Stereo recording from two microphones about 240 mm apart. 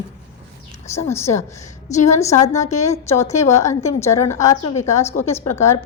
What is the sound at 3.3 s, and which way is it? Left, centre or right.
Speech, left.